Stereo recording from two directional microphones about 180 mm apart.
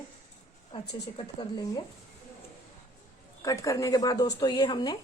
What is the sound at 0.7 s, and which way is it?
A woman's voice, 25° left (ahead or behind).